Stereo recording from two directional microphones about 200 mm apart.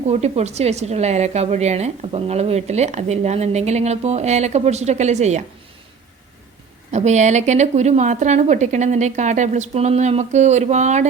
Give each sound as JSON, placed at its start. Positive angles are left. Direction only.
{"t": 0.1, "sound": "a woman's voice", "side_deg": -35}
{"t": 6.9, "sound": "a woman's voice", "side_deg": -35}